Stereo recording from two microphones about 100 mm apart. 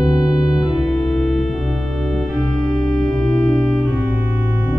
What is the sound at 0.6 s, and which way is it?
Organ, centre (ahead or behind).